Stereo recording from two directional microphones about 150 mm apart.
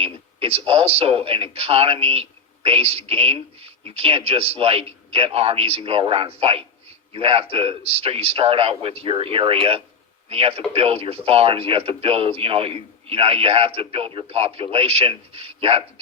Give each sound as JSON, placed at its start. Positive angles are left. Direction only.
{"t": 0.0, "sound": "speech", "side_deg": -40}